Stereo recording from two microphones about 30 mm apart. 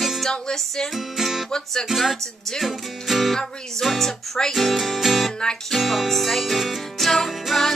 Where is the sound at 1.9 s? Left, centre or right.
Centre.